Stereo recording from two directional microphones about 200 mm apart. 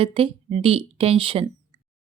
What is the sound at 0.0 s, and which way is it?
Speech, 30° right (ahead or behind).